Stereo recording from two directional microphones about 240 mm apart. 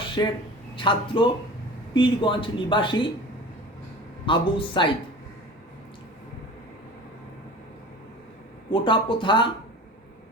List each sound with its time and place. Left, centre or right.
0.2 s speech: centre
4.3 s speech: centre
8.7 s speech: centre